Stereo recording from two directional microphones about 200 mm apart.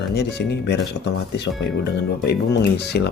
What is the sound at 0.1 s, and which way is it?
Speech, 55° left (ahead or behind).